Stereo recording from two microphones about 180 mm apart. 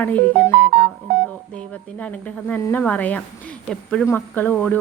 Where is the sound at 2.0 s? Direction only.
10° left (ahead or behind).